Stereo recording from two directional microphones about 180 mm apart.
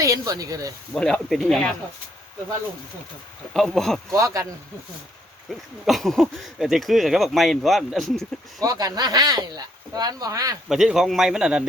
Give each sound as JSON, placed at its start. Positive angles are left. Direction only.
{"t": 0.0, "sound": "speech", "side_deg": -20}
{"t": 0.9, "sound": "speech", "side_deg": 5}
{"t": 3.5, "sound": "speech", "side_deg": 0}
{"t": 4.1, "sound": "speech", "side_deg": -15}
{"t": 5.5, "sound": "speech", "side_deg": 0}
{"t": 8.6, "sound": "speech", "side_deg": -20}
{"t": 10.7, "sound": "speech", "side_deg": 0}